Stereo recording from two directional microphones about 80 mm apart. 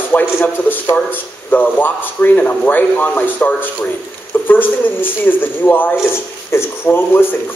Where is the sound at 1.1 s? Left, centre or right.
Left.